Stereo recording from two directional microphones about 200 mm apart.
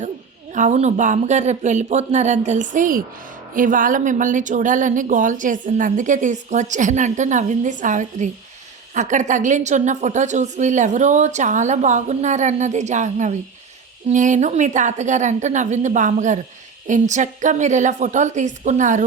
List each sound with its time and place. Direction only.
0.5 s speech: 35° right (ahead or behind)